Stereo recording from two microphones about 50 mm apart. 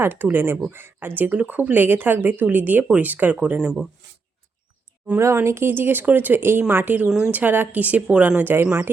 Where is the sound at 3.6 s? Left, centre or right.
Centre.